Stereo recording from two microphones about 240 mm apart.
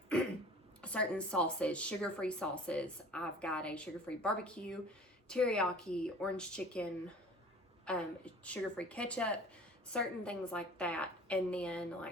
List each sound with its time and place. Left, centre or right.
0.8 s speech: centre
7.9 s speech: centre